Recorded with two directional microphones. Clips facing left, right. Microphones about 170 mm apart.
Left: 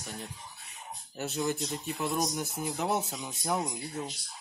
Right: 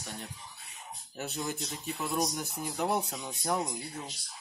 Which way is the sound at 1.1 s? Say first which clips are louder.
Left 4 dB; centre (ahead or behind).